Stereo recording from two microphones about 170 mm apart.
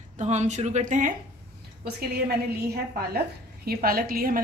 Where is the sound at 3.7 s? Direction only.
60° right (ahead or behind).